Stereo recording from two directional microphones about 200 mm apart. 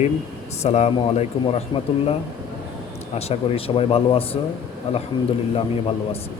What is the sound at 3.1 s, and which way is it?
A man's voice, 30° left (ahead or behind).